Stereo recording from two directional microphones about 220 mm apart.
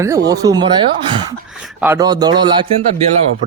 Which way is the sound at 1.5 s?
5° right (ahead or behind).